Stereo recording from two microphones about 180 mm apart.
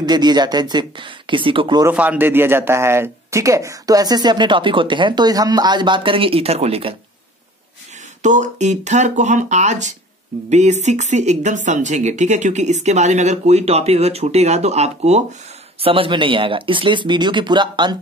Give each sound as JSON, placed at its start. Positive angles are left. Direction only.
{"t": 0.0, "sound": "speech", "side_deg": -25}
{"t": 1.9, "sound": "speech", "side_deg": -10}
{"t": 8.2, "sound": "a woman's voice", "side_deg": -45}